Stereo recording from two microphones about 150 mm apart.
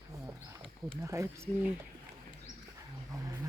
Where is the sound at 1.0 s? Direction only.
20° right (ahead or behind).